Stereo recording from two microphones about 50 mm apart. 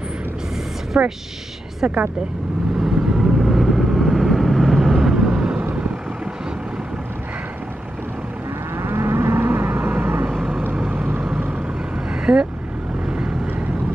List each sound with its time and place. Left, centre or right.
1.0 s a woman's voice: right
2.8 s vehicle: centre
5.1 s vehicle: centre
8.7 s vehicle: right
12.1 s vehicle: centre